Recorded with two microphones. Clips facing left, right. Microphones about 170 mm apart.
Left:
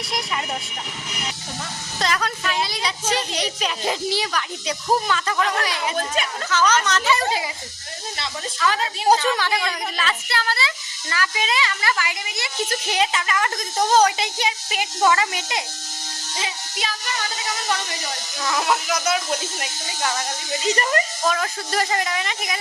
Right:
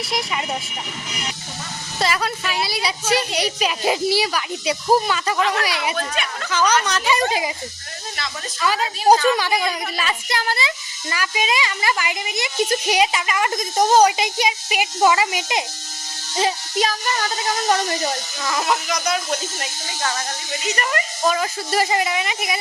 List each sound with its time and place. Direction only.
0.1 s speech: 5° right (ahead or behind)
2.0 s a woman's voice: 5° right (ahead or behind)
8.6 s a woman's voice: 10° right (ahead or behind)
16.4 s speech: 40° right (ahead or behind)
18.4 s speech: centre (ahead or behind)
20.5 s speech: 30° left (ahead or behind)
21.2 s a woman's voice: 10° right (ahead or behind)